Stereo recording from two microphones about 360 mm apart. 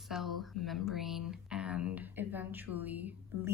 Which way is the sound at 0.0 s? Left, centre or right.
Centre.